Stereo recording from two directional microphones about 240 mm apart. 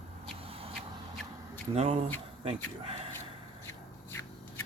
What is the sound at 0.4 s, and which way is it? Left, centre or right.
Vehicle, right.